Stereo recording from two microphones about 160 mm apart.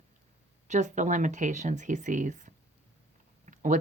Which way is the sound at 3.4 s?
50° right (ahead or behind).